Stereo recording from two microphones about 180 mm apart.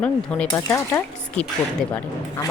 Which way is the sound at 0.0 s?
5° left (ahead or behind).